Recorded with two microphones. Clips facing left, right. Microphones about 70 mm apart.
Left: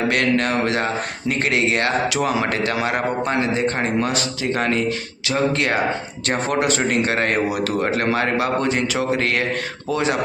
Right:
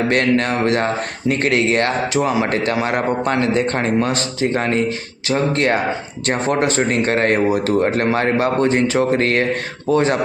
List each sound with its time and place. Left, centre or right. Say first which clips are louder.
0.1 s a man's voice: right 2 dB; right
2.1 s a man's voice: right 3 dB; right
4.0 s a man's voice: right 3 dB; right